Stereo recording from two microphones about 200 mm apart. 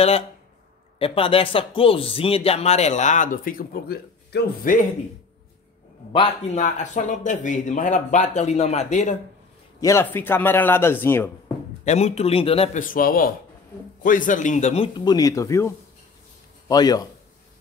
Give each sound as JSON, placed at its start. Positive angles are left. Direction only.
{"t": 0.9, "sound": "speech", "side_deg": 30}
{"t": 6.1, "sound": "a man's voice", "side_deg": 30}
{"t": 9.8, "sound": "speech", "side_deg": 15}
{"t": 11.8, "sound": "a man's voice", "side_deg": 35}
{"t": 12.8, "sound": "a man's voice", "side_deg": 45}
{"t": 15.0, "sound": "speech", "side_deg": 20}